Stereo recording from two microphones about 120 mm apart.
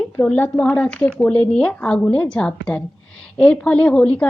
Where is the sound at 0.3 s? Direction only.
10° left (ahead or behind).